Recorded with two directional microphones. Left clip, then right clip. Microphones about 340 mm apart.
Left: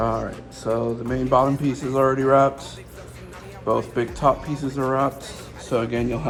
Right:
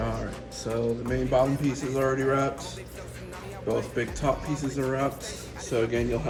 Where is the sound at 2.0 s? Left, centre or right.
Left.